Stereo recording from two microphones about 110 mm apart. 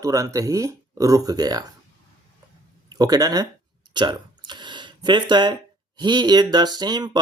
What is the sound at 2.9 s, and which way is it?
Speech, 35° right (ahead or behind).